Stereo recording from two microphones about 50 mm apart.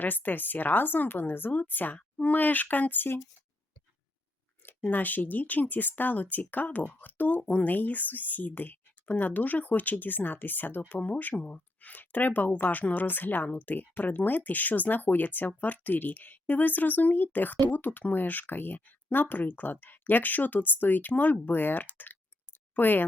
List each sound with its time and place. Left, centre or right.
0.0 s speech: left
4.9 s speech: left